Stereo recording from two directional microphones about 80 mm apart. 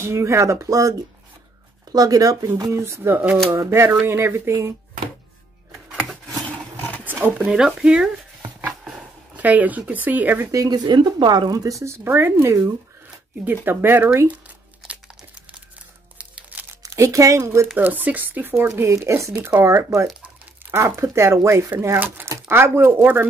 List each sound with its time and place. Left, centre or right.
0.0 s speech: right
2.7 s speech: right
7.1 s speech: right
9.4 s speech: centre
10.5 s speech: right
10.9 s speech: right
16.2 s music: centre
16.8 s speech: right
17.7 s speech: right
18.8 s speech: right
19.3 s speech: right
19.6 s speech: right